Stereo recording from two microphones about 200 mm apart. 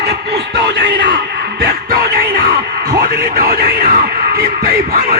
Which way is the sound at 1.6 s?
50° right (ahead or behind).